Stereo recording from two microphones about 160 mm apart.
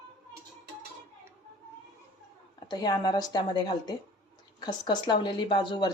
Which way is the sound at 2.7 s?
25° left (ahead or behind).